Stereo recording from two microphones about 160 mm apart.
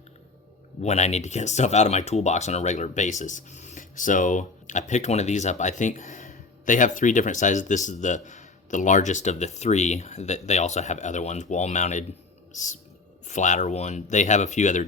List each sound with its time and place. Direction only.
0.8 s speech: 45° left (ahead or behind)